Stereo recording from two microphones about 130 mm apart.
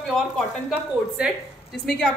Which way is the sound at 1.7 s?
5° left (ahead or behind).